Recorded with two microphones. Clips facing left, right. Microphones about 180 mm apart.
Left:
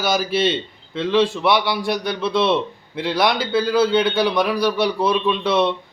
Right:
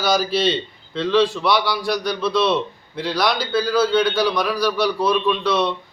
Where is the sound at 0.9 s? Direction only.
20° left (ahead or behind).